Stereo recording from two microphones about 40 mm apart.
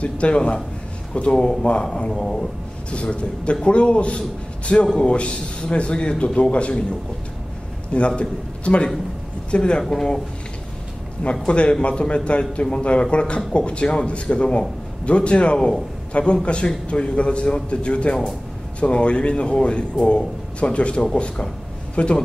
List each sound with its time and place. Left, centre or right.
0.0 s a man's voice: left
2.9 s speech: left
8.2 s a man's voice: left
11.4 s speech: left
15.5 s a man's voice: centre
16.1 s a man's voice: left